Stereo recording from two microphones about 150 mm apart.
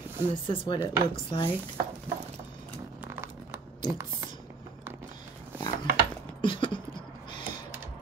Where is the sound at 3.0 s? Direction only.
15° right (ahead or behind).